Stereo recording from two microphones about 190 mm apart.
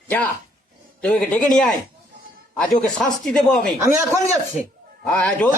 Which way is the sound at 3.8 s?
15° right (ahead or behind).